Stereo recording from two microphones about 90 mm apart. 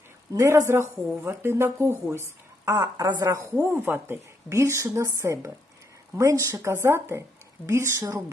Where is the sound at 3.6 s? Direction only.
25° right (ahead or behind).